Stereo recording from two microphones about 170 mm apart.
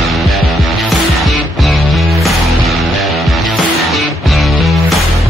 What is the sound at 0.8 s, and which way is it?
Music, centre (ahead or behind).